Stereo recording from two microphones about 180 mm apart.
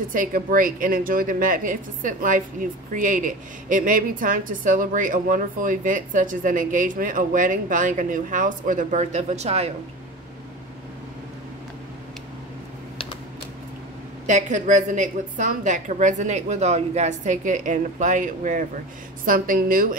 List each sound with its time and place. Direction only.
0.1 s speech: 50° right (ahead or behind)
14.2 s speech: 45° right (ahead or behind)